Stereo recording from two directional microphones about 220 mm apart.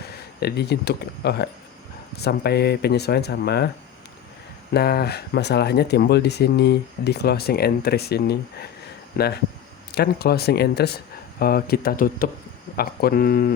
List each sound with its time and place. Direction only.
0.3 s speech: 50° left (ahead or behind)
4.7 s speech: 45° left (ahead or behind)